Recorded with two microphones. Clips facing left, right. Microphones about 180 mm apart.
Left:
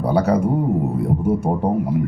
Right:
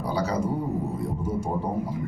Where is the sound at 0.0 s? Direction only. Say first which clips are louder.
Left 9 dB; 60° left (ahead or behind).